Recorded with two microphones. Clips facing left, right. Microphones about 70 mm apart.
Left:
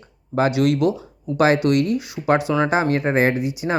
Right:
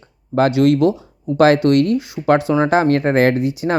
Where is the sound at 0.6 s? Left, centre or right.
Right.